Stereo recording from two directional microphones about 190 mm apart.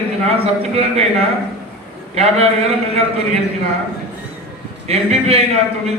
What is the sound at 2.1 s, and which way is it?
Speech, 35° right (ahead or behind).